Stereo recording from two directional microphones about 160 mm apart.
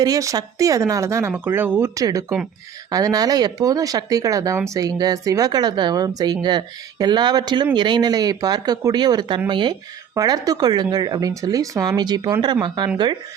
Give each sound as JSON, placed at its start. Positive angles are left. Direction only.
{"t": 0.0, "sound": "speech", "side_deg": -20}